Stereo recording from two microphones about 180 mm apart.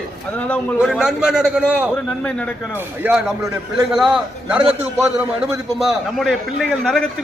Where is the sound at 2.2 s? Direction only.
5° left (ahead or behind).